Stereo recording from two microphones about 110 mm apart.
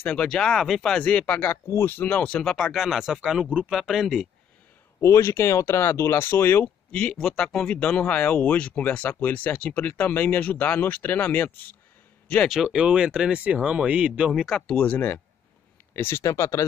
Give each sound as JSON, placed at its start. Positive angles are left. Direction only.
{"t": 0.0, "sound": "speech", "side_deg": 10}
{"t": 5.0, "sound": "speech", "side_deg": 25}
{"t": 12.4, "sound": "speech", "side_deg": -5}
{"t": 14.8, "sound": "speech", "side_deg": 15}